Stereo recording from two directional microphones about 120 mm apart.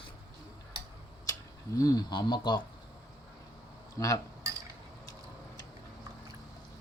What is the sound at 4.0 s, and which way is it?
Speech, 25° left (ahead or behind).